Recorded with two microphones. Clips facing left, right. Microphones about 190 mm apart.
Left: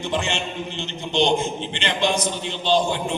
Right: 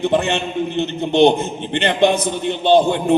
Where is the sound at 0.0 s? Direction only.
60° right (ahead or behind).